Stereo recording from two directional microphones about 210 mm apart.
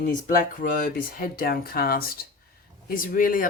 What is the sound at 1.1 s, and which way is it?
A woman's voice, 45° left (ahead or behind).